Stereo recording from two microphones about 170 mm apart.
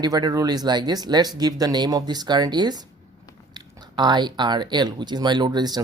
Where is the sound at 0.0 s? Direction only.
25° right (ahead or behind).